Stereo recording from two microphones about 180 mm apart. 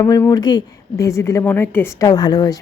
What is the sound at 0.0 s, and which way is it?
A woman's voice, 15° left (ahead or behind).